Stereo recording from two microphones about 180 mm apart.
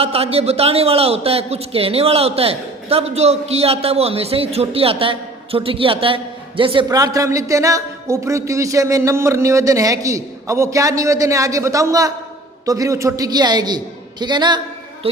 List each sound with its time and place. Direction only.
0.0 s a man's voice: 35° right (ahead or behind)